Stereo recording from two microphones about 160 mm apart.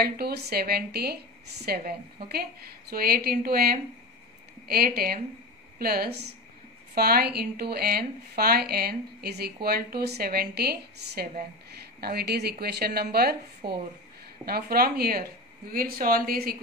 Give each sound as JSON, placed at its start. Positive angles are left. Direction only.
{"t": 0.0, "sound": "a woman's voice", "side_deg": -80}
{"t": 2.9, "sound": "a woman's voice", "side_deg": -70}
{"t": 7.0, "sound": "speech", "side_deg": -75}
{"t": 13.6, "sound": "a woman's voice", "side_deg": -85}
{"t": 14.4, "sound": "speech", "side_deg": -70}